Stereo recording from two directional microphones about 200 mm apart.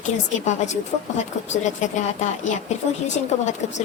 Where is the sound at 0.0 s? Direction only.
35° left (ahead or behind).